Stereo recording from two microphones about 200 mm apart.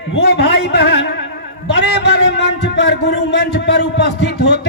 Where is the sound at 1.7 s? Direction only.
60° left (ahead or behind).